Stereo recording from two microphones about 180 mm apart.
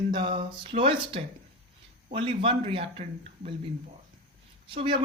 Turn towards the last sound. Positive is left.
turn(degrees=-30)  # may be behind; listen again after turning